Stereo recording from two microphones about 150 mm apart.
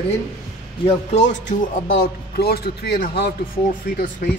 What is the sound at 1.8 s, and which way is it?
Speech, 80° left.